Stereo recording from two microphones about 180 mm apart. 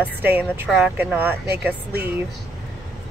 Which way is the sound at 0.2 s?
10° right (ahead or behind).